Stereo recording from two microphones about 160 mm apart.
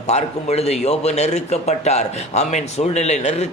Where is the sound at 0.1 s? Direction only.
45° left (ahead or behind).